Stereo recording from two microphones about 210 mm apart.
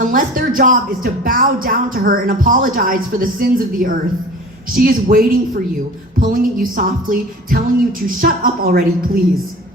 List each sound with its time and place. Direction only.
0.0 s speech: 40° right (ahead or behind)
4.7 s music: 45° right (ahead or behind)